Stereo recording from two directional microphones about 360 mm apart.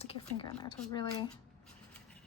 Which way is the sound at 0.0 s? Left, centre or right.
Centre.